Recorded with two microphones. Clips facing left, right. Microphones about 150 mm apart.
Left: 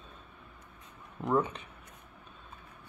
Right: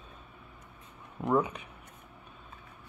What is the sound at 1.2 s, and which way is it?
Speech, 10° right (ahead or behind).